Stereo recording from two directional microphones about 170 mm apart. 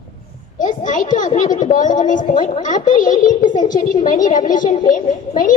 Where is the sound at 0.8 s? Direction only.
50° left (ahead or behind).